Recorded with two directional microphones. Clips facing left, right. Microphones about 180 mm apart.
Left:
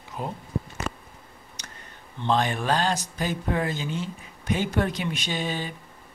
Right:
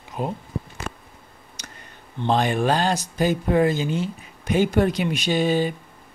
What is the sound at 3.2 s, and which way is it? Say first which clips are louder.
Speech: right 8 dB; 40° right (ahead or behind).